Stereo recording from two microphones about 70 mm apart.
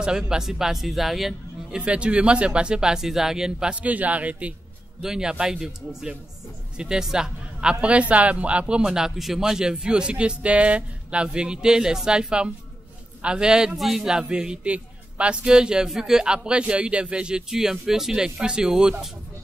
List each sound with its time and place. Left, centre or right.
0.3 s a man's voice: centre
1.8 s a man's voice: centre
3.8 s a man's voice: right
5.0 s a man's voice: centre